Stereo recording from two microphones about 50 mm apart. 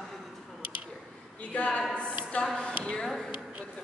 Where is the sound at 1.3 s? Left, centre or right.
Left.